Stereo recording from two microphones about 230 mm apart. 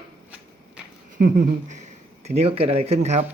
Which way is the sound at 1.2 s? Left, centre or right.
Right.